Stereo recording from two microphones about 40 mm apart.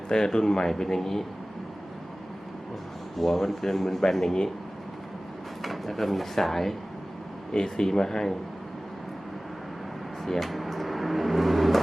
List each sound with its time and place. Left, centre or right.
0.1 s speech: centre
3.2 s speech: centre
5.6 s speech: centre
7.5 s speech: centre
10.2 s vehicle: centre